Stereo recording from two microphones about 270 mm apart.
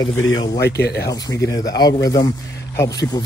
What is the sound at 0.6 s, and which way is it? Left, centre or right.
Speech, left.